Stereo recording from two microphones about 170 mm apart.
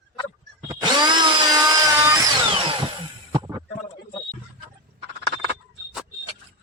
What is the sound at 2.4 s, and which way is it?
Drill, 30° right (ahead or behind).